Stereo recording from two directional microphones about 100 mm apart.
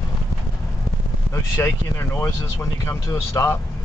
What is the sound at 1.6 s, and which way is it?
Speech, 25° left (ahead or behind).